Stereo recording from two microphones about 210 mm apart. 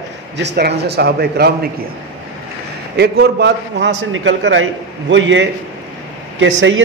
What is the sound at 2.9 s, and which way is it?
A man's voice, 50° right (ahead or behind).